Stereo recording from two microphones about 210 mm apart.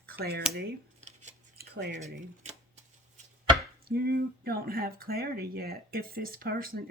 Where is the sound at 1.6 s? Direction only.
50° right (ahead or behind).